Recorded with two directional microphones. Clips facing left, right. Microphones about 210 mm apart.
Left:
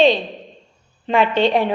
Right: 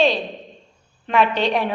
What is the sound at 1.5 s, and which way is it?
Speech, 25° left (ahead or behind).